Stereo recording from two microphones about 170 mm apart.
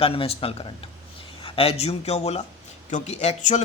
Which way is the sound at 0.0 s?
35° left (ahead or behind).